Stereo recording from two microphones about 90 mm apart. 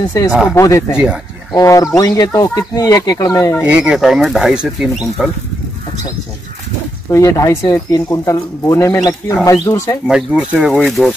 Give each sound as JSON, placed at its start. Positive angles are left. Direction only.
{"t": 0.3, "sound": "speech", "side_deg": -5}
{"t": 0.6, "sound": "speech", "side_deg": 35}
{"t": 0.9, "sound": "speech", "side_deg": -10}
{"t": 1.5, "sound": "speech", "side_deg": 35}
{"t": 3.6, "sound": "speech", "side_deg": -10}
{"t": 4.0, "sound": "speech", "side_deg": 0}
{"t": 7.1, "sound": "speech", "side_deg": 35}
{"t": 10.0, "sound": "speech", "side_deg": -10}